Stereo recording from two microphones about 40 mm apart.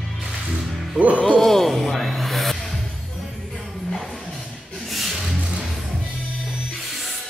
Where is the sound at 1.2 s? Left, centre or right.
Centre.